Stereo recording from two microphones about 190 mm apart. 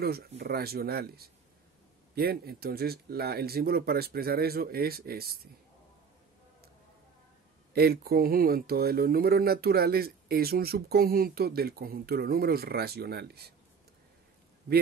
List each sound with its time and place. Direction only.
0.0 s speech: 55° right (ahead or behind)
7.7 s speech: 55° right (ahead or behind)